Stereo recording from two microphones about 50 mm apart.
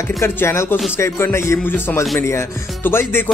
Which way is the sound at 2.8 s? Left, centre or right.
Left.